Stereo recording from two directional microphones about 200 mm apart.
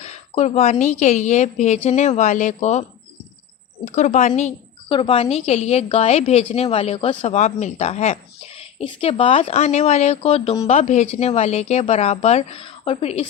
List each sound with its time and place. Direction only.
0.0 s a woman's voice: 35° left (ahead or behind)
3.9 s a woman's voice: 35° left (ahead or behind)